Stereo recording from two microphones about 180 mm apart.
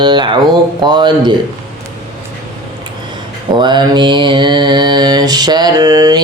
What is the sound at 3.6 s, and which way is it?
Mantra, 25° right (ahead or behind).